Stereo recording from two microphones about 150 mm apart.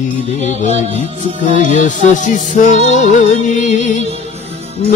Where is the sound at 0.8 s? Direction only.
45° right (ahead or behind).